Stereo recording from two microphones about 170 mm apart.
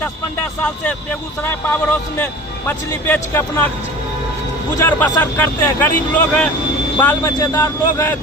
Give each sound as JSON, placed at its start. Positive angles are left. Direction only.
{"t": 1.5, "sound": "a man's voice", "side_deg": 10}
{"t": 4.8, "sound": "a man's voice", "side_deg": 10}